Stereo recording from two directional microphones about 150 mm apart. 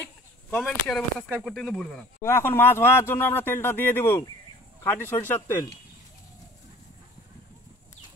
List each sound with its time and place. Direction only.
0.0 s a sound: 5° left (ahead or behind)
1.4 s speech: centre (ahead or behind)
2.2 s speech: 15° left (ahead or behind)